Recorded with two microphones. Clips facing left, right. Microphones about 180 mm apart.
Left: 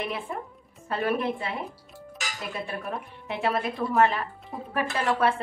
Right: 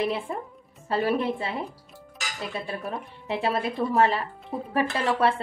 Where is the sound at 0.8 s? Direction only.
30° right (ahead or behind).